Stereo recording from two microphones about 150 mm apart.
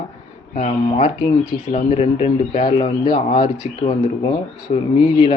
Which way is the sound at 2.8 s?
35° left (ahead or behind).